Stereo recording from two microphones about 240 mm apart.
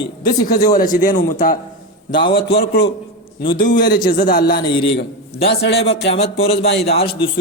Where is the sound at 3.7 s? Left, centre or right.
Left.